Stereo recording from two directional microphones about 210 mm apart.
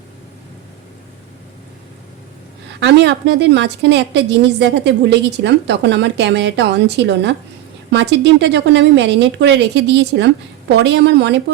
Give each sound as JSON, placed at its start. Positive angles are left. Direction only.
{"t": 2.8, "sound": "a woman's voice", "side_deg": -55}